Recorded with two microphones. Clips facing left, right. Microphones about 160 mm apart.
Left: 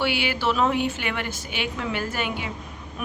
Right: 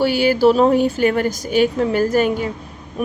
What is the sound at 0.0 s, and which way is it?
A woman's voice, 40° right (ahead or behind).